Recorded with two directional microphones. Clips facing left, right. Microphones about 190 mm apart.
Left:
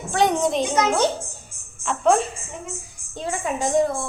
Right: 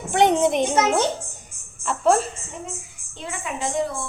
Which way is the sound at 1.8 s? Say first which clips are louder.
Even; centre (ahead or behind).